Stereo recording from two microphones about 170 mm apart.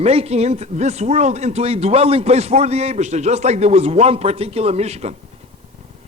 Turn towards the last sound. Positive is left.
turn(degrees=-40)  # may be behind; listen again after turning